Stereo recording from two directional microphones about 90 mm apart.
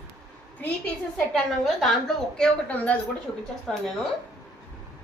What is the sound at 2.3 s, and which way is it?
Speech, 15° left (ahead or behind).